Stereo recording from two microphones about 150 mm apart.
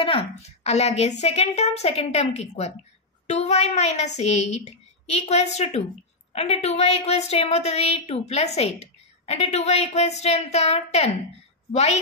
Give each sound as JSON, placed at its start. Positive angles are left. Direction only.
{"t": 0.0, "sound": "a woman's voice", "side_deg": 40}